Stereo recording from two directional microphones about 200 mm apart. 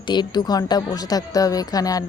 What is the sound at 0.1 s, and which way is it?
A woman's voice, 20° left (ahead or behind).